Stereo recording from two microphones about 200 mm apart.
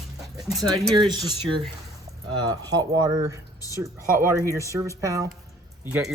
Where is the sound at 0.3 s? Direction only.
20° right (ahead or behind).